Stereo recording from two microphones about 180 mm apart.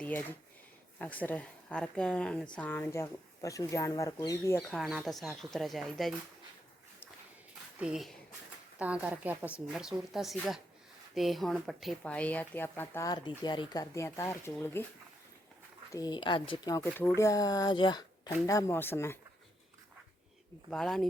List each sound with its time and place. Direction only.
0.0 s speech: 10° left (ahead or behind)
4.7 s speech: centre (ahead or behind)
7.8 s speech: 5° right (ahead or behind); by 14.8 s 10° left (ahead or behind)
15.9 s speech: 20° left (ahead or behind)
20.7 s speech: 5° left (ahead or behind)